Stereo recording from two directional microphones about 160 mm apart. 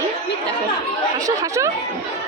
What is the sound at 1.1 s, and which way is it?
Speech, 20° right (ahead or behind).